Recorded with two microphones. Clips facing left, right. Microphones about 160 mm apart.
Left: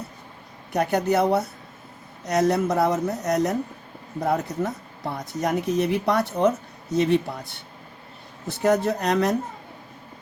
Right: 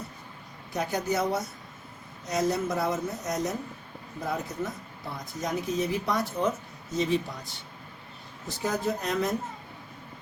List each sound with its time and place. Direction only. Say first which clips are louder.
0.7 s speech: left 7 dB; 65° left (ahead or behind)